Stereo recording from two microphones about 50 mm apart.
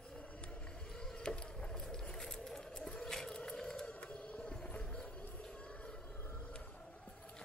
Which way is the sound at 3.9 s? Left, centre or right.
Left.